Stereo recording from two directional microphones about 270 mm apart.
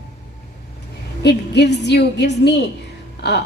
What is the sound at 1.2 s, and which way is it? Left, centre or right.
A woman's voice, left.